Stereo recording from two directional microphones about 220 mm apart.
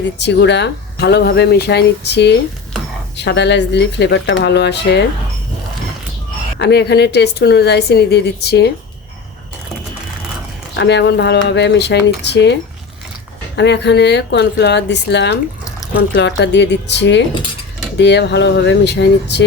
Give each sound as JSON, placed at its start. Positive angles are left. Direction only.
{"t": 0.2, "sound": "speech", "side_deg": 50}
{"t": 6.6, "sound": "speech", "side_deg": 50}
{"t": 10.8, "sound": "speech", "side_deg": 50}
{"t": 13.6, "sound": "speech", "side_deg": 50}